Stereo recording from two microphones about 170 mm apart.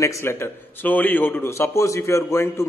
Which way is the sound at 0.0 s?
15° left (ahead or behind).